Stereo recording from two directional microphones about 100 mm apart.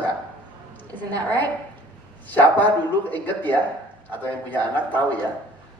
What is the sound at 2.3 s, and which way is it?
A woman's voice, 15° left (ahead or behind).